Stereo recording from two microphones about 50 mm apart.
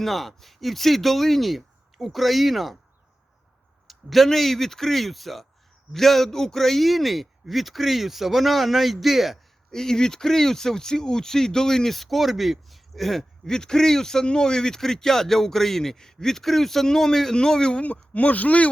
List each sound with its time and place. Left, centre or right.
0.0 s a man's voice: centre
3.8 s a man's voice: centre
9.7 s speech: centre
17.8 s speech: left